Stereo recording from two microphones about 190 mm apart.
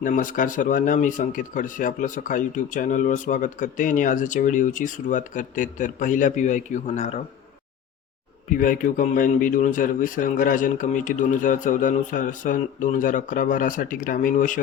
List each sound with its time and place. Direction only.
0.0 s speech: 45° left (ahead or behind)
8.4 s speech: 45° left (ahead or behind)